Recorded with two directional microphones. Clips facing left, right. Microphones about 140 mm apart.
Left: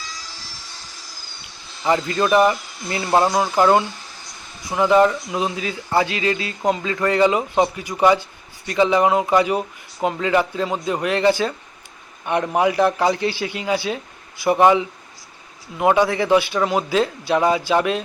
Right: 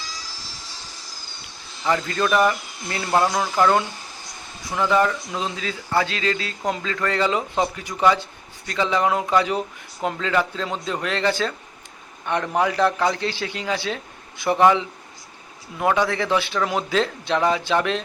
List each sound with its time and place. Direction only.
0.0 s vehicle: centre (ahead or behind)
1.8 s a man's voice: 20° left (ahead or behind)
16.6 s a man's voice: 5° left (ahead or behind)